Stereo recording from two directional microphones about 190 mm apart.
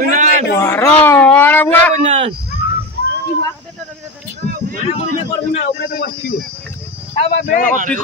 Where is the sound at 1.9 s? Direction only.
35° right (ahead or behind).